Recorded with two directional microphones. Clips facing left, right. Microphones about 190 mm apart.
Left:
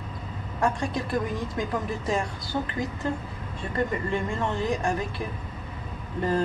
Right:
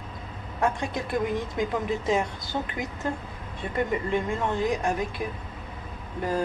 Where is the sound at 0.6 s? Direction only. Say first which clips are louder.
Even; 20° right (ahead or behind).